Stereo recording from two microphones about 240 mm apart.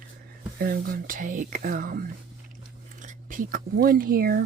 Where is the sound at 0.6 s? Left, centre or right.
Right.